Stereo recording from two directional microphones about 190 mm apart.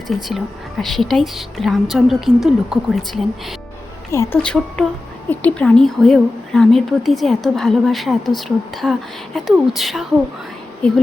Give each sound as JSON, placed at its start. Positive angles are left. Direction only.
{"t": 0.2, "sound": "a woman's voice", "side_deg": 0}
{"t": 4.1, "sound": "speech", "side_deg": 15}
{"t": 4.4, "sound": "a woman's voice", "side_deg": 5}